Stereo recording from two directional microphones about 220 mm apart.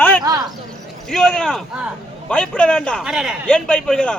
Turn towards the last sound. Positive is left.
turn(degrees=5)  # may be behind; listen again after turning